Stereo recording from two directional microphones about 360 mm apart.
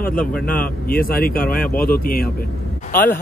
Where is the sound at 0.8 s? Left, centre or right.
Left.